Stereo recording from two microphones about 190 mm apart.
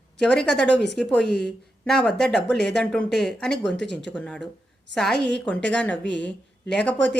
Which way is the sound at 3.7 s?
65° left (ahead or behind).